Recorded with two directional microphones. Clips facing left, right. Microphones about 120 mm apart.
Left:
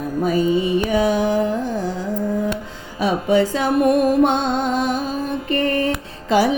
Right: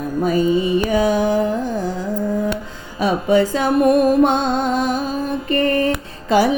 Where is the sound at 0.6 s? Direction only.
40° right (ahead or behind).